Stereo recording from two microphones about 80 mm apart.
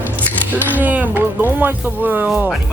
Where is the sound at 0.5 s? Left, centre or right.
Right.